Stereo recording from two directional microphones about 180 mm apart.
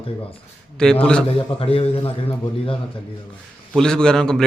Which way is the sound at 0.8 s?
5° left (ahead or behind).